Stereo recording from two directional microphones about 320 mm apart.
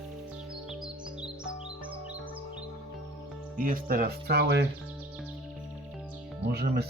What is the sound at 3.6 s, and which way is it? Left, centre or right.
Speech, right.